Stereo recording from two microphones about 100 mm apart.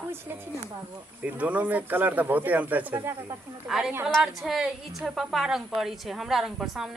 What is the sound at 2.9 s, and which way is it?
Speech, 30° right (ahead or behind).